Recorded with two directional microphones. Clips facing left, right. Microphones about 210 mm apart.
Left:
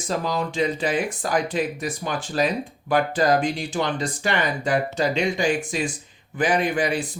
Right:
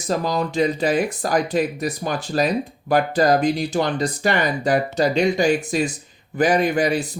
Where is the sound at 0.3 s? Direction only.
40° right (ahead or behind).